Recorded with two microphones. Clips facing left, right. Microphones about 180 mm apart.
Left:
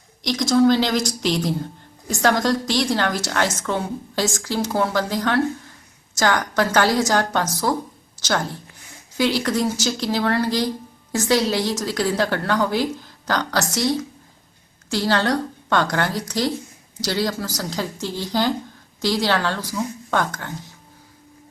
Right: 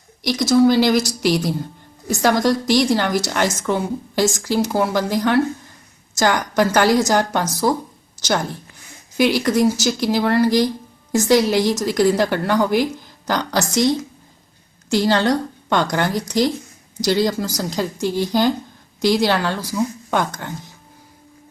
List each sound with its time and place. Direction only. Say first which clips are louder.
0.2 s a woman's voice: right 2 dB; 10° right (ahead or behind)
9.1 s a woman's voice: right 4 dB; 15° right (ahead or behind)